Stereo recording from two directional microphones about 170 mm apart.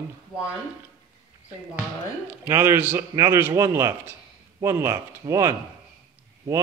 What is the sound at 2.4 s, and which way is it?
A man's voice, 15° right (ahead or behind).